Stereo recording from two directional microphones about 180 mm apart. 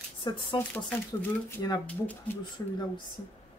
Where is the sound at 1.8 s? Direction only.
10° left (ahead or behind).